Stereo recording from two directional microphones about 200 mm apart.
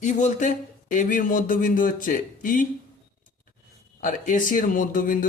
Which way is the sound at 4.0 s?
40° left (ahead or behind).